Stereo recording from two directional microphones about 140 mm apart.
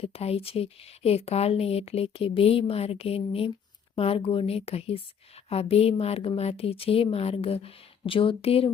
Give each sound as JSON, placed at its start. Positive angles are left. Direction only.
{"t": 0.0, "sound": "speech", "side_deg": 45}